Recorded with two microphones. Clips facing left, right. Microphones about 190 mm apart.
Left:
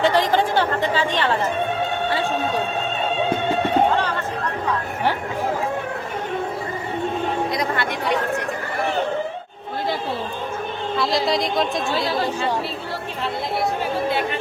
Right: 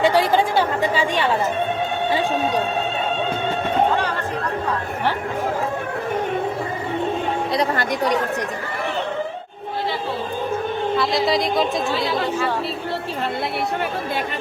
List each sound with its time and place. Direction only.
0.0 s speech: 10° right (ahead or behind)
7.5 s speech: 35° right (ahead or behind)
10.9 s speech: centre (ahead or behind)